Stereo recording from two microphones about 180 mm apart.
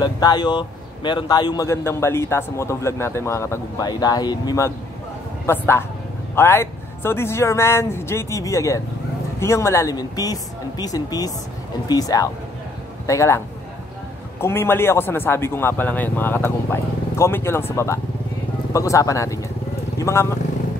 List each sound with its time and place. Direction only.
0.0 s a man's voice: 25° left (ahead or behind)
14.4 s a man's voice: 15° left (ahead or behind)